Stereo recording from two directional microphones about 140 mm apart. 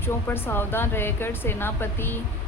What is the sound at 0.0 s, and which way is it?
Speech, 15° left (ahead or behind).